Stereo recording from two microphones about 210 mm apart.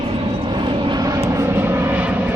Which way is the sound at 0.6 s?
20° right (ahead or behind).